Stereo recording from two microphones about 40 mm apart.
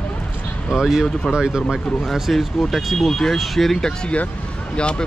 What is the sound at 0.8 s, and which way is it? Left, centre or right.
Speech, centre.